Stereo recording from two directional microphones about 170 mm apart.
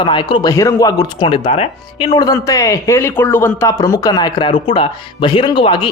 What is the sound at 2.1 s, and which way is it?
Speech, 20° left (ahead or behind).